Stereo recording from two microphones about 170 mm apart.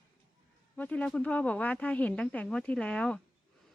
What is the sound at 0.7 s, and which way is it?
Speech, 10° left (ahead or behind).